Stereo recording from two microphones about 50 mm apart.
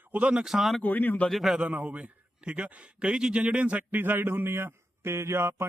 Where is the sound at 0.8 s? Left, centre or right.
Left.